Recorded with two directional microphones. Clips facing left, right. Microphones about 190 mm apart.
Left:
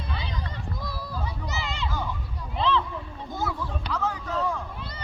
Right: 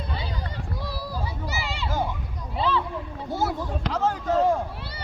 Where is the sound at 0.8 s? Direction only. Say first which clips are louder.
Right 3 dB; 10° right (ahead or behind).